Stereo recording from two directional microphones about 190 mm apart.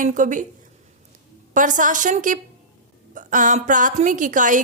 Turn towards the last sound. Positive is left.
turn(degrees=-40)  # may be behind; listen again after turning